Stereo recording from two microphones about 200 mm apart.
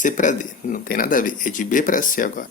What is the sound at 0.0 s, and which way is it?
Speech, 40° left (ahead or behind).